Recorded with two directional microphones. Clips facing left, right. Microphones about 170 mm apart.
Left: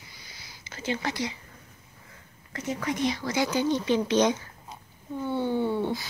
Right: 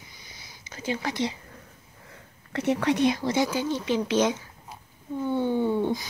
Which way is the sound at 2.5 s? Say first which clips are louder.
Right 7 dB; 70° right (ahead or behind).